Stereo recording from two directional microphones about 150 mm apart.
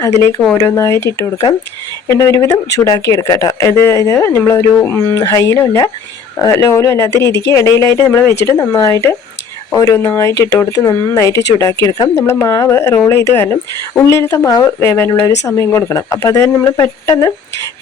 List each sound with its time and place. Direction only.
0.5 s speech: 20° left (ahead or behind)